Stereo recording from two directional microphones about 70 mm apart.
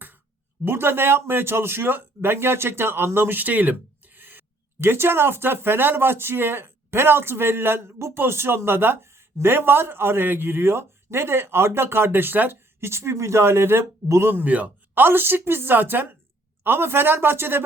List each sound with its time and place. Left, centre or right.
0.6 s speech: right